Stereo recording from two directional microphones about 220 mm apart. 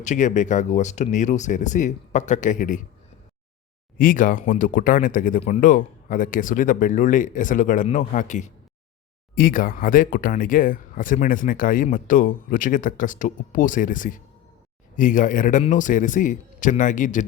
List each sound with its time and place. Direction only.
0.0 s speech: 35° left (ahead or behind)
3.9 s speech: 40° left (ahead or behind)